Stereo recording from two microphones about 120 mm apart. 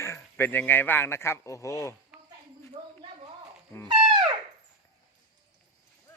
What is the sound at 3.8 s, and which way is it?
Music, 40° right (ahead or behind).